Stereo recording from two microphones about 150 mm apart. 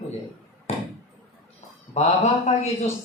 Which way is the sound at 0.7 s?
50° left (ahead or behind).